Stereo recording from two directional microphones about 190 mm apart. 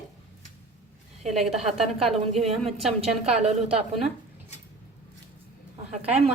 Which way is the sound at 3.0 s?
35° right (ahead or behind).